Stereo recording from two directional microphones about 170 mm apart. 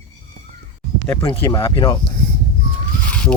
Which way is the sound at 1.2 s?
30° left (ahead or behind).